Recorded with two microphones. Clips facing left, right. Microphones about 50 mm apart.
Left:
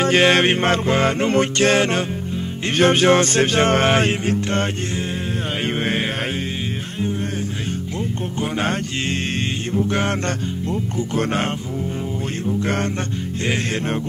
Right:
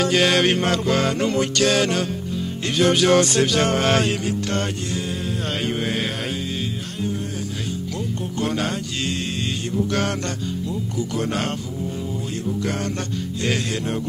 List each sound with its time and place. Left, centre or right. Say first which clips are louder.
0.0 s mantra: left 3 dB; left
8.4 s music: left 1 dB; left